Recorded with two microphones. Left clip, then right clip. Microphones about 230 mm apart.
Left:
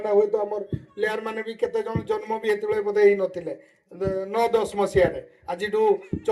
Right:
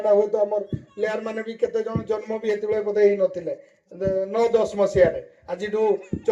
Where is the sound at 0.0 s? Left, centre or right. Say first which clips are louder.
Right 2 dB; left.